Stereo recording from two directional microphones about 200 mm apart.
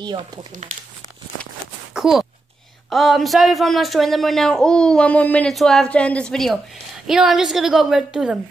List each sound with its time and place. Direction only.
0.0 s speech: 20° right (ahead or behind)
2.0 s speech: centre (ahead or behind)